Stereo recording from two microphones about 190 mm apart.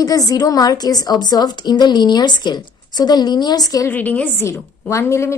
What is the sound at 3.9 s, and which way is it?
A woman's voice, 10° left (ahead or behind).